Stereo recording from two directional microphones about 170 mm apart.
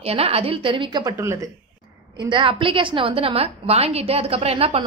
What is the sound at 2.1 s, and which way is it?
A woman's voice, 25° right (ahead or behind).